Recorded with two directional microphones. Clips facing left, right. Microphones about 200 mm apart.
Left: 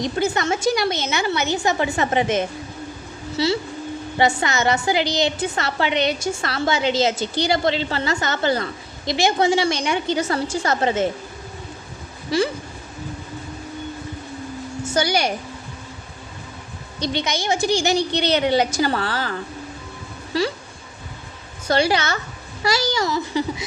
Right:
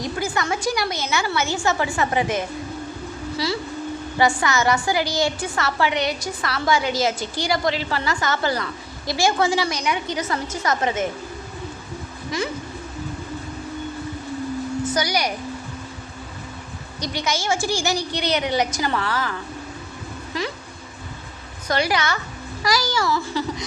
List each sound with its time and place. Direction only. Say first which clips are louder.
0.0 s a woman's voice: left 4 dB; 25° left (ahead or behind)
12.3 s speech: left 6 dB; 30° left (ahead or behind)
14.9 s a woman's voice: left 5 dB; 30° left (ahead or behind)
17.0 s a woman's voice: left 2 dB; 25° left (ahead or behind)
21.7 s a woman's voice: left 3 dB; 30° left (ahead or behind)